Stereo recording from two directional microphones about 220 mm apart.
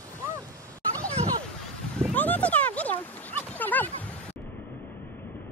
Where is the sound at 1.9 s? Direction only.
5° left (ahead or behind).